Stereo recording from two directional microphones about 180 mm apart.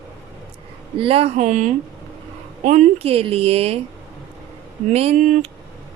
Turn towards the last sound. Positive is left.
turn(degrees=-40)  # may be behind; listen again after turning